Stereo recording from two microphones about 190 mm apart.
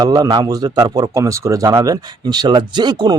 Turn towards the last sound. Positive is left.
turn(degrees=-20)  # may be behind; listen again after turning